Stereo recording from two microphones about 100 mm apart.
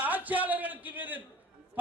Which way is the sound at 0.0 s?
15° right (ahead or behind).